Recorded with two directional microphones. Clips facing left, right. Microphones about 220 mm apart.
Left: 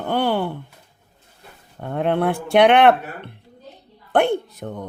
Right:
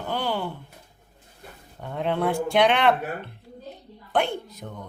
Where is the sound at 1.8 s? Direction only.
55° left (ahead or behind).